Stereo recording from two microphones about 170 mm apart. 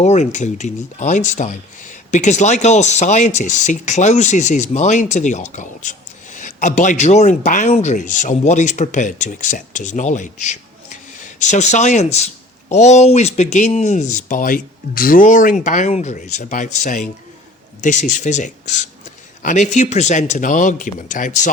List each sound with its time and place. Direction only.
0.0 s speech: 45° left (ahead or behind)